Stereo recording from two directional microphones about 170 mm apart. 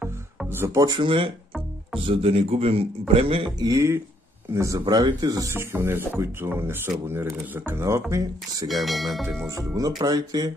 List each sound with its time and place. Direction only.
0.0 s music: 10° right (ahead or behind); by 1.3 s 30° right (ahead or behind)
2.0 s speech: 35° right (ahead or behind)
3.5 s speech: 20° right (ahead or behind)
8.6 s speech: centre (ahead or behind)
9.5 s speech: 20° right (ahead or behind)